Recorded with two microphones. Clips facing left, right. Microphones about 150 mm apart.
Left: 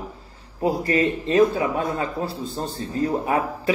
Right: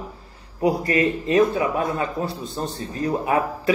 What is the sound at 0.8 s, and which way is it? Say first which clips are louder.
A man's voice: even; 30° left (ahead or behind).